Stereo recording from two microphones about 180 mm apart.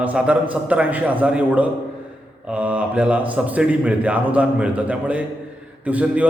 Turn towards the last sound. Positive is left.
turn(degrees=-10)  # may be behind; listen again after turning